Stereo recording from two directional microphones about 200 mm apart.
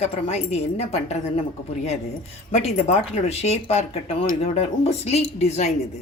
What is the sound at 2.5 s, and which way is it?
Speech, 35° left (ahead or behind).